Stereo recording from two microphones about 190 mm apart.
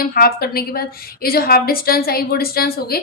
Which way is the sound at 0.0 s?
50° left (ahead or behind).